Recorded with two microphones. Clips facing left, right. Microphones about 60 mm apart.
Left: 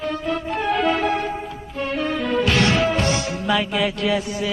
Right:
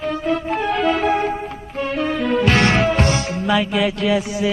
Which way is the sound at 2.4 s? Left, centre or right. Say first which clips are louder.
Right 3 dB; right.